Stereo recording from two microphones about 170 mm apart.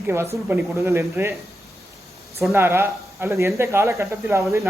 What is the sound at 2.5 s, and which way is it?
A man's voice, 15° right (ahead or behind).